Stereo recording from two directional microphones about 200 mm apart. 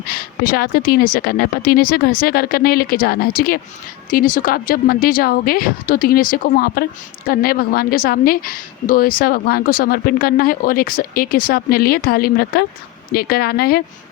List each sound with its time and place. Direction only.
0.1 s a woman's voice: 50° left (ahead or behind)